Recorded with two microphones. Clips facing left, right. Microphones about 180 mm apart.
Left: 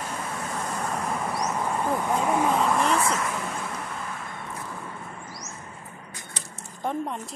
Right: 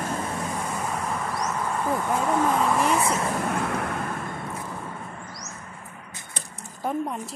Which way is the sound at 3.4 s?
65° right (ahead or behind).